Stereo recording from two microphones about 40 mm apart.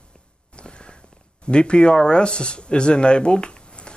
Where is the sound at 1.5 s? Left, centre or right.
Left.